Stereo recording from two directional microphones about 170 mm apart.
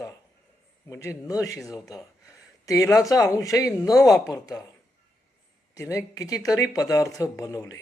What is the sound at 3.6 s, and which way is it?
Speech, centre (ahead or behind).